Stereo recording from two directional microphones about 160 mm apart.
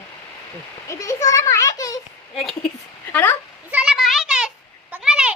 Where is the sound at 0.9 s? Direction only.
20° left (ahead or behind).